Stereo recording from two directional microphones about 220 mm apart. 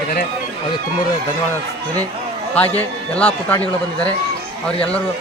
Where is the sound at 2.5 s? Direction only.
5° left (ahead or behind).